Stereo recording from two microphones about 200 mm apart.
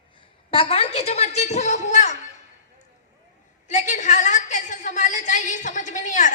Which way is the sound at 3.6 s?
40° left (ahead or behind).